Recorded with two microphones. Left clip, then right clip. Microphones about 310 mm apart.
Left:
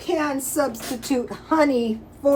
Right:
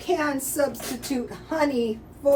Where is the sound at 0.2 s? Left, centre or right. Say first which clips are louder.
Left 2 dB; centre.